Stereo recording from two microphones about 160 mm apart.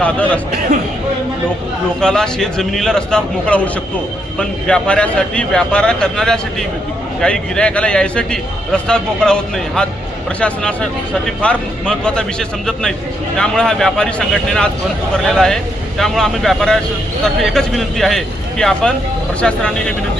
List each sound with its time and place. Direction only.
0.0 s speech: 10° left (ahead or behind)
2.0 s a man's voice: 5° left (ahead or behind)